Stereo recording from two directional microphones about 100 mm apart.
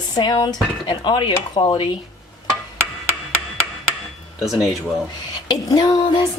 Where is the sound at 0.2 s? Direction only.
45° left (ahead or behind).